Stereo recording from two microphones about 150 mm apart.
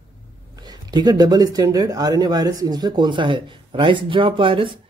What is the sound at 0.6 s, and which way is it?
Speech, 25° right (ahead or behind).